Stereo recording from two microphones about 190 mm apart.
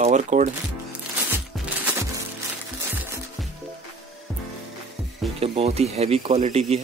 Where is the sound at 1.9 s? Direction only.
15° right (ahead or behind).